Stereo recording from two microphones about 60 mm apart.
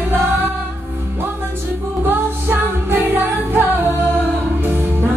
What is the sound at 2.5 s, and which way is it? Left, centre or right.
Music, right.